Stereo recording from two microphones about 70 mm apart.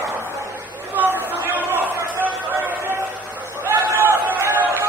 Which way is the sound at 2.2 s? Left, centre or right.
Right.